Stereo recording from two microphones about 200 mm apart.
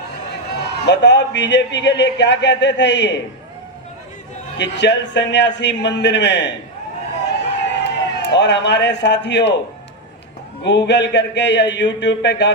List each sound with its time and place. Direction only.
0.5 s a man's voice: 60° left (ahead or behind)
4.5 s a man's voice: 60° left (ahead or behind)
7.3 s a sound: 60° left (ahead or behind)
10.6 s a man's voice: 60° left (ahead or behind)